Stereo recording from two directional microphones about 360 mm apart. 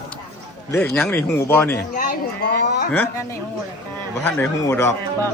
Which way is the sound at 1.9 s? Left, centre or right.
Left.